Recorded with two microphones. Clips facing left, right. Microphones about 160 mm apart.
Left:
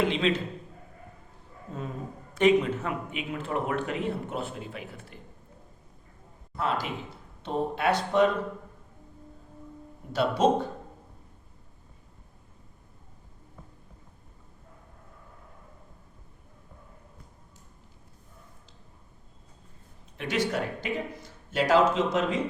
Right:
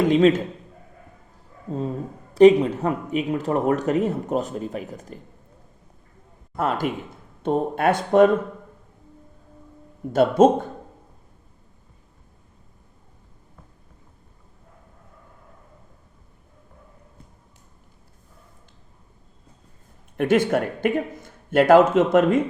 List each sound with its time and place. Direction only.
0.0 s a man's voice: 45° right (ahead or behind)
2.3 s speech: 35° right (ahead or behind)
6.6 s a man's voice: 50° right (ahead or behind)
10.1 s a man's voice: 50° right (ahead or behind)
20.1 s a man's voice: 50° right (ahead or behind)